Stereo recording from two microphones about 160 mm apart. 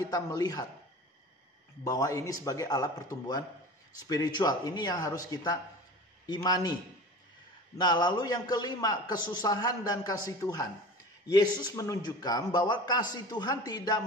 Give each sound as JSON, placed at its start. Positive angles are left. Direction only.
{"t": 0.1, "sound": "a man's voice", "side_deg": 25}
{"t": 1.9, "sound": "a man's voice", "side_deg": 20}